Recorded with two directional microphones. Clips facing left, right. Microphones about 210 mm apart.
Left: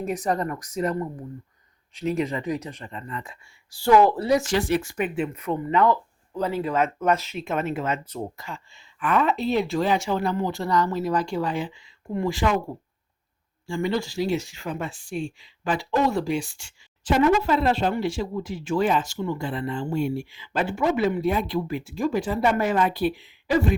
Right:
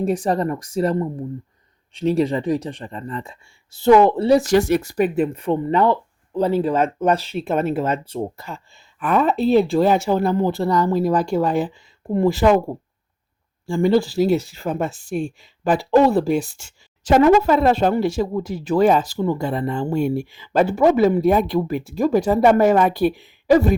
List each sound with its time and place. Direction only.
0.0 s speech: 30° right (ahead or behind)
11.1 s speech: 50° right (ahead or behind)
13.8 s speech: 35° right (ahead or behind)
14.7 s speech: 45° right (ahead or behind)